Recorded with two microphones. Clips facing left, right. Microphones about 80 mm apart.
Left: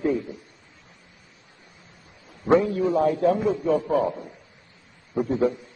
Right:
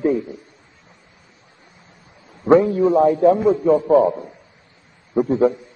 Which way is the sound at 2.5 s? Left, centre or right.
Right.